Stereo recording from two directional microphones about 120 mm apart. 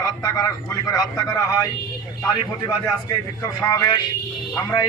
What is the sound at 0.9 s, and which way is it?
Speech, 30° left (ahead or behind).